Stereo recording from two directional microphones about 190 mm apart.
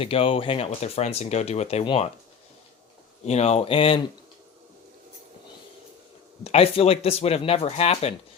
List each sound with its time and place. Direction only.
0.0 s speech: 30° left (ahead or behind)
3.2 s speech: 35° left (ahead or behind)
6.4 s speech: 30° left (ahead or behind)